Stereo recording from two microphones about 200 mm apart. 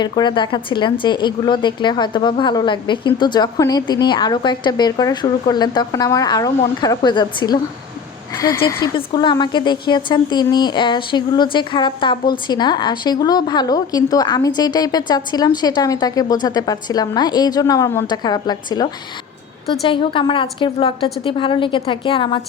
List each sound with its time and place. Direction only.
0.0 s a woman's voice: 20° left (ahead or behind)
19.9 s a woman's voice: 25° left (ahead or behind)